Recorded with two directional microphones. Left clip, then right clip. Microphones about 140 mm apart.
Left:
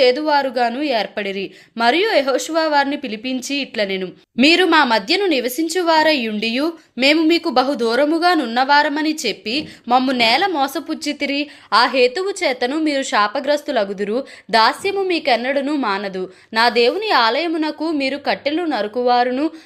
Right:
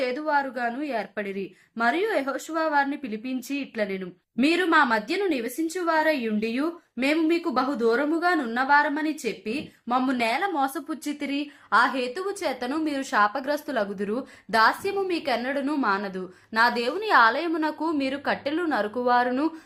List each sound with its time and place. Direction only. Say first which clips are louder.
0.0 s a woman's voice: left 10 dB; 50° left (ahead or behind); by 19.5 s 20° left (ahead or behind)